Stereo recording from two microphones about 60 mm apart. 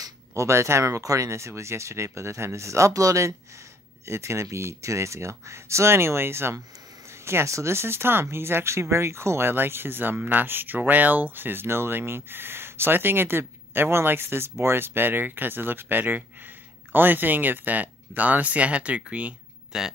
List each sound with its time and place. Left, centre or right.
0.3 s speech: right
2.9 s speech: right
4.0 s speech: right
19.7 s speech: centre